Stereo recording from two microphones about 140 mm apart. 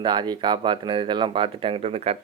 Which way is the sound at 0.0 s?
35° right (ahead or behind).